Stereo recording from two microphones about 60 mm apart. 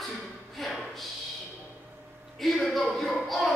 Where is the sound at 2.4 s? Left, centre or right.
Centre.